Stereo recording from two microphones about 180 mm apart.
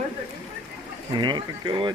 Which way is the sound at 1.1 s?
25° right (ahead or behind).